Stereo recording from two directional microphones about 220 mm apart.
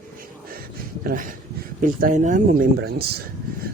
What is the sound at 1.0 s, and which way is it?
Speech, 40° right (ahead or behind).